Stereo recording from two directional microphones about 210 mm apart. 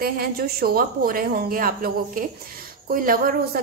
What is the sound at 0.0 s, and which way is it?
A woman's voice, 45° right (ahead or behind).